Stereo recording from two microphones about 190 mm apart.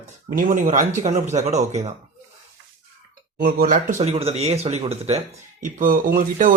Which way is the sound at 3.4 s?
45° right (ahead or behind).